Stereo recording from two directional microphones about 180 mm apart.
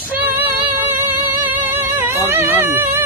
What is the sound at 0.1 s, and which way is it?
Music, 10° right (ahead or behind).